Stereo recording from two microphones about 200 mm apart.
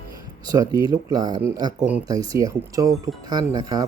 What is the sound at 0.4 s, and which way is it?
Speech, 20° right (ahead or behind).